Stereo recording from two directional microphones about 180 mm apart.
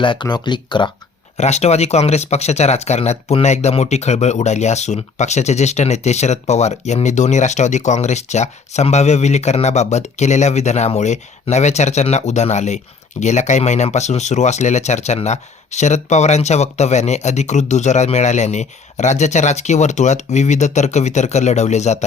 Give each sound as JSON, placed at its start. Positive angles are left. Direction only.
{"t": 0.0, "sound": "speech", "side_deg": 25}
{"t": 1.4, "sound": "speech", "side_deg": 35}